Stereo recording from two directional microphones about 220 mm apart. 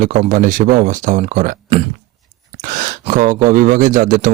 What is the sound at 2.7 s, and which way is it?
Speech, 35° right (ahead or behind).